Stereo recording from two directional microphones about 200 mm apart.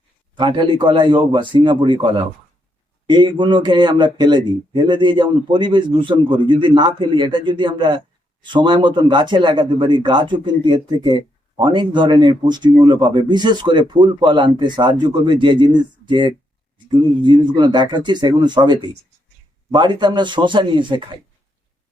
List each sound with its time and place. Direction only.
0.3 s a man's voice: 25° right (ahead or behind)